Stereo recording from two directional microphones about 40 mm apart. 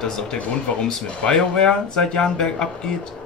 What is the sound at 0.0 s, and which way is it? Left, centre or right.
Speech, centre.